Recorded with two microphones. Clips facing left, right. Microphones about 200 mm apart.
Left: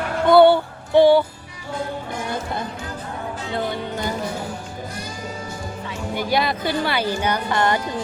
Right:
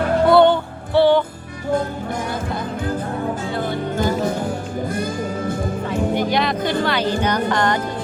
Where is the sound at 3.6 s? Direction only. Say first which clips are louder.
Right 3 dB; 50° right (ahead or behind).